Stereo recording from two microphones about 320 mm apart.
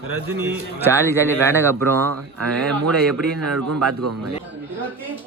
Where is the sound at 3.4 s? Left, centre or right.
Right.